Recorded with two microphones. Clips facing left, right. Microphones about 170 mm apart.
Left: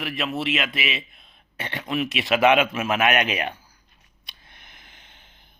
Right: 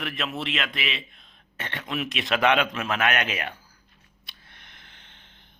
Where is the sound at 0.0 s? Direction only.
Centre (ahead or behind).